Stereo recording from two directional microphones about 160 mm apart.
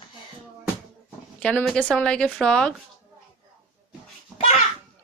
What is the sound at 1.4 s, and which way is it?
Speech, 5° left (ahead or behind).